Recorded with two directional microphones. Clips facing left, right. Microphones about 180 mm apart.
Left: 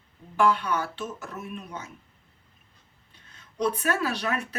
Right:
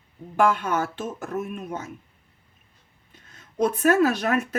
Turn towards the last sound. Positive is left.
turn(degrees=-50)  # may be behind; listen again after turning